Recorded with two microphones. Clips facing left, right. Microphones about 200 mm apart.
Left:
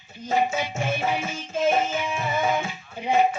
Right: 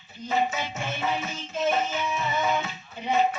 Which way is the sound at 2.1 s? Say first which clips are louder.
Left 2 dB; 50° left (ahead or behind).